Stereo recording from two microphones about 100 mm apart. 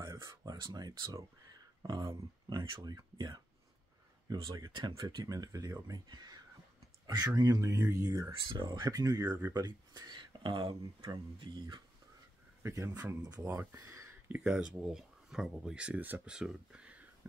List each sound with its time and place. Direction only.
0.0 s a sound: 30° right (ahead or behind)
0.5 s speech: 40° right (ahead or behind)
1.1 s a sound: 40° right (ahead or behind)
2.7 s speech: 40° right (ahead or behind)
12.6 s speech: 30° right (ahead or behind)
13.4 s speech: 25° right (ahead or behind)
14.3 s speech: 10° right (ahead or behind)